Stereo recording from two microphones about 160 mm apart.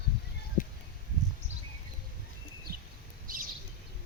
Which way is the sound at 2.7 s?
70° right (ahead or behind).